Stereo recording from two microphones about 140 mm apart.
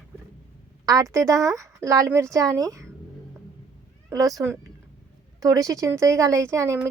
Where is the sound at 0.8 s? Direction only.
25° right (ahead or behind).